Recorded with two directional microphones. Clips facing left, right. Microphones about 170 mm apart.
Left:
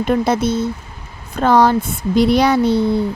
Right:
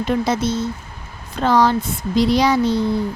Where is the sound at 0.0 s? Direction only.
55° left (ahead or behind).